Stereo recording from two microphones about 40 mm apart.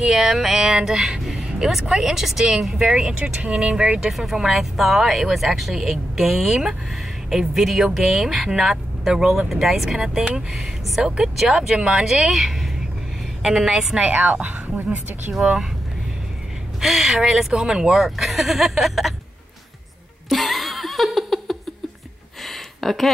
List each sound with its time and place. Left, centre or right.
0.0 s speech: centre
1.3 s vehicle: centre
1.7 s speech: centre
3.2 s speech: right
4.1 s speech: centre; by 12.0 s right
12.3 s a woman's voice: centre
14.1 s a woman's voice: right
16.8 s speech: centre
17.5 s speech: centre
17.9 s speech: centre
20.2 s laughter: centre
22.4 s a sound: centre